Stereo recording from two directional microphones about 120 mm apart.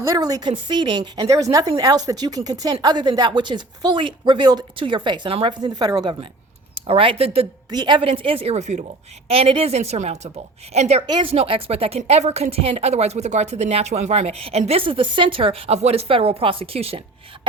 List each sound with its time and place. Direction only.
0.0 s speech: 30° right (ahead or behind)
6.7 s speech: 50° right (ahead or behind)
7.7 s speech: 40° right (ahead or behind); by 8.8 s 70° right (ahead or behind)
9.3 s a woman's voice: 50° right (ahead or behind)
11.0 s a woman's voice: 40° right (ahead or behind)